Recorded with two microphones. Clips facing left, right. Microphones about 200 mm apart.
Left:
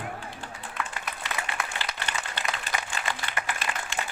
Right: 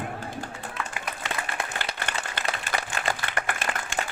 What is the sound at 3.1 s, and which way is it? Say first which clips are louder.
Applause: right 4 dB; 50° right (ahead or behind).